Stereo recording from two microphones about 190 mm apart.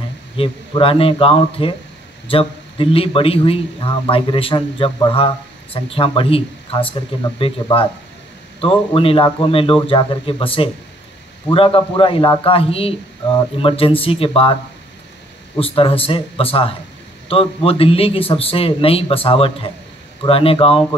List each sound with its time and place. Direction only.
0.4 s a man's voice: 30° left (ahead or behind)
15.6 s a man's voice: 30° left (ahead or behind)